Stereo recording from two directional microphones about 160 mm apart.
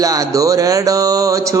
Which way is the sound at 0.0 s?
20° right (ahead or behind).